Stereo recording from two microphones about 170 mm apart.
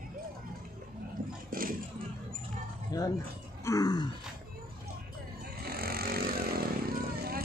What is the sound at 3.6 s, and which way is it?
Groan, 20° left (ahead or behind).